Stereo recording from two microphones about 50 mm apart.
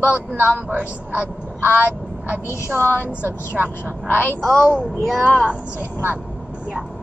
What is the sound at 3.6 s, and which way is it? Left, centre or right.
Speech, right.